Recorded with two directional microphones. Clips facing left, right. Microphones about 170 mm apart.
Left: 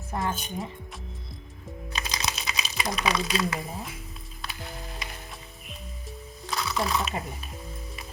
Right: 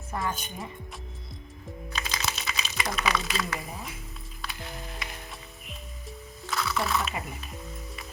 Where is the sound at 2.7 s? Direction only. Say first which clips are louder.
Left 2 dB; 25° left (ahead or behind).